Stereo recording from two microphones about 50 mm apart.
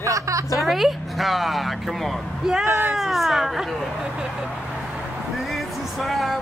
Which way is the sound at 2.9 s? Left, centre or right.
Centre.